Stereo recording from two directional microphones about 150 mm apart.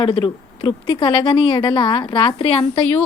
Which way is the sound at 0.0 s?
35° left (ahead or behind).